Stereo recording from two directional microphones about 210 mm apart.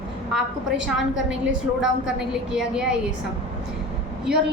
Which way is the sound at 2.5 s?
5° right (ahead or behind).